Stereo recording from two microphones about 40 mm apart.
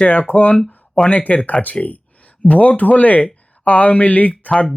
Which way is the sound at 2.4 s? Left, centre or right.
Left.